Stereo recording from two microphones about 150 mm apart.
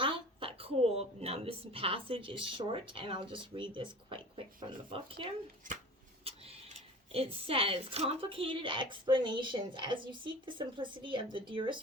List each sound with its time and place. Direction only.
0.0 s speech: 35° right (ahead or behind)
7.1 s a woman's voice: 40° right (ahead or behind)